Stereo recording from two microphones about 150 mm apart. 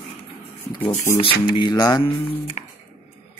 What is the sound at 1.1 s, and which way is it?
Music, 35° left (ahead or behind).